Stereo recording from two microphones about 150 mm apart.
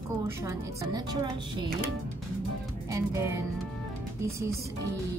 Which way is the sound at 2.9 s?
20° right (ahead or behind).